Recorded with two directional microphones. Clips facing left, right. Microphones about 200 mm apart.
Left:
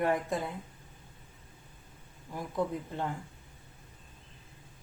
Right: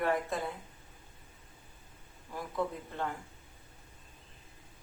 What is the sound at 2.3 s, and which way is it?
Speech, 15° left (ahead or behind).